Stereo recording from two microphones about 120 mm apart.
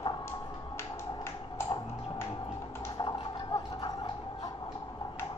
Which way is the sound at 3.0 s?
40° left (ahead or behind).